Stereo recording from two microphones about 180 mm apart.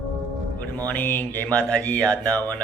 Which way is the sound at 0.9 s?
10° left (ahead or behind).